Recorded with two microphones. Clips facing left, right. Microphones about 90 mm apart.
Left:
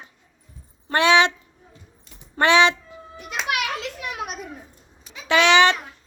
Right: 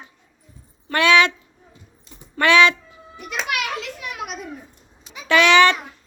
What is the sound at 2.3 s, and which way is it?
Speech, 25° left (ahead or behind).